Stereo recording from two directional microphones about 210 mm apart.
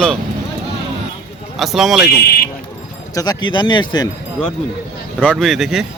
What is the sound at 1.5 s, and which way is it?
Speech, centre (ahead or behind).